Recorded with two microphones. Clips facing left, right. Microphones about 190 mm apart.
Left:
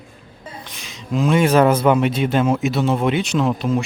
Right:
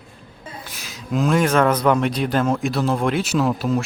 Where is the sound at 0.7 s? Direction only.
5° right (ahead or behind).